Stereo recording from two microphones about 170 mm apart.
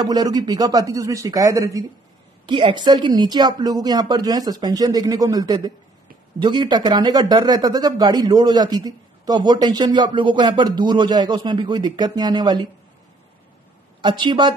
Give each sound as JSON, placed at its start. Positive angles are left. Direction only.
{"t": 0.0, "sound": "speech", "side_deg": -20}
{"t": 14.0, "sound": "speech", "side_deg": -30}